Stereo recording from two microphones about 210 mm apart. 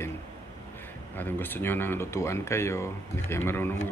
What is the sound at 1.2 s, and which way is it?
Speech, 10° left (ahead or behind).